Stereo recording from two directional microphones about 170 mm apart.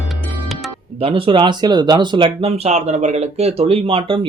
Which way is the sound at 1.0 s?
30° right (ahead or behind).